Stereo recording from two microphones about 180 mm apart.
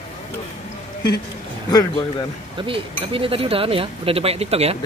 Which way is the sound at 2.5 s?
30° right (ahead or behind).